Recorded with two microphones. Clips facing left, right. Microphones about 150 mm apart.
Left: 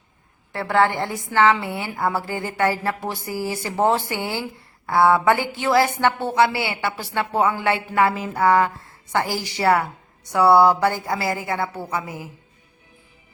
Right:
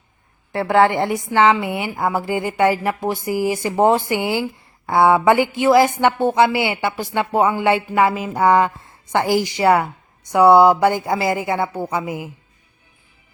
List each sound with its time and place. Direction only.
0.5 s a woman's voice: 20° right (ahead or behind)